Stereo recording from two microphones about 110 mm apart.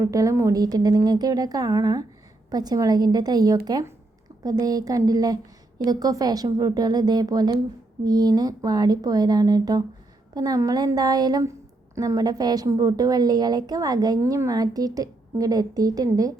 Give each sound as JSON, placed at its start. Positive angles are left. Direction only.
{"t": 0.0, "sound": "speech", "side_deg": -30}